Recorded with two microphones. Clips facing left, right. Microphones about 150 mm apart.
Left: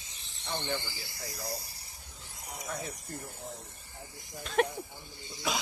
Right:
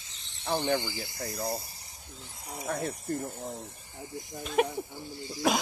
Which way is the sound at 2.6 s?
60° right (ahead or behind).